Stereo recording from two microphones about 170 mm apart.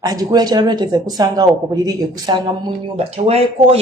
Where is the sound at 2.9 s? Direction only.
35° right (ahead or behind).